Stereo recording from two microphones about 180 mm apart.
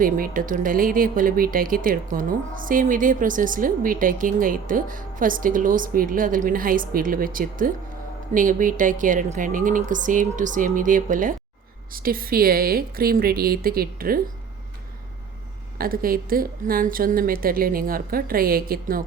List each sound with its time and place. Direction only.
0.0 s a woman's voice: 50° right (ahead or behind)
15.8 s speech: 55° right (ahead or behind)